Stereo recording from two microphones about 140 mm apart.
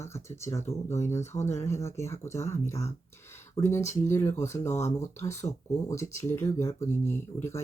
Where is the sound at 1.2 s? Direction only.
55° left (ahead or behind).